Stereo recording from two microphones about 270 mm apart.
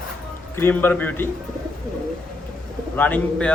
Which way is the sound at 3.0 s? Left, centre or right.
Centre.